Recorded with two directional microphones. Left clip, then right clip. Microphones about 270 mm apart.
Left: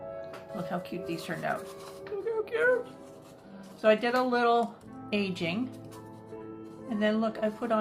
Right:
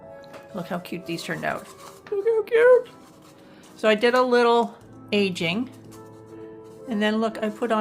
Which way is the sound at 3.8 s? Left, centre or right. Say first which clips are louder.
Right 6 dB; right.